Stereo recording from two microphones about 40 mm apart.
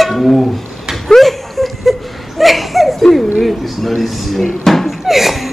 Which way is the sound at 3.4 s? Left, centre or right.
Centre.